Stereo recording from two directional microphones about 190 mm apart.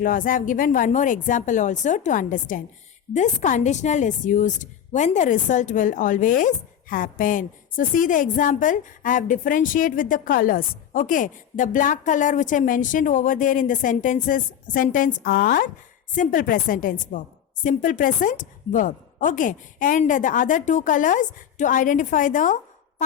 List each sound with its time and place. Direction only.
0.0 s a woman's voice: 45° left (ahead or behind)